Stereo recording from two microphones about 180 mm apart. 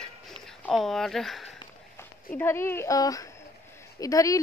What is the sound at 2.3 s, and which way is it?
A woman's voice, 15° left (ahead or behind).